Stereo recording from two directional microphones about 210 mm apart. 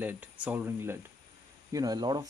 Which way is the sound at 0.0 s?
5° right (ahead or behind).